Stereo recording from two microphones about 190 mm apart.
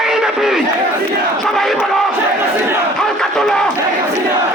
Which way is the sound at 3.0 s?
5° left (ahead or behind).